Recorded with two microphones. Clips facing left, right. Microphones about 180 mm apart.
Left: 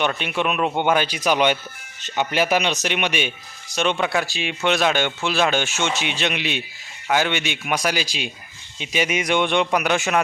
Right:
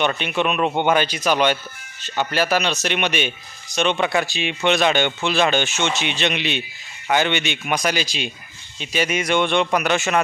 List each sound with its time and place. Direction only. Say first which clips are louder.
0.0 s speech: right 2 dB; 5° left (ahead or behind)